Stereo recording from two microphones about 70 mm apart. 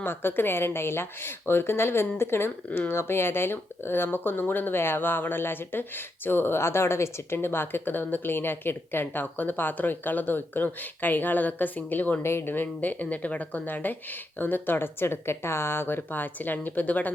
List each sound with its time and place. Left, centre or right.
0.0 s speech: left
2.6 s speech: left
2.9 s speech: left
12.2 s speech: left